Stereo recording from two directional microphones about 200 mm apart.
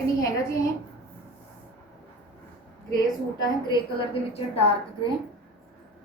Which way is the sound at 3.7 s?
30° left (ahead or behind).